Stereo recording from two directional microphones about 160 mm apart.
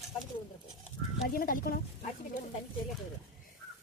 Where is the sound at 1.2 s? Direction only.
65° left (ahead or behind).